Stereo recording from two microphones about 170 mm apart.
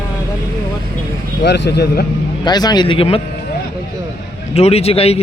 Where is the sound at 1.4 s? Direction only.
80° left.